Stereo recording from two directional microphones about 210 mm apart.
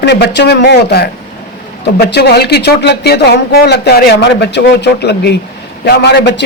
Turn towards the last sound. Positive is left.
turn(degrees=55)  # may be behind; listen again after turning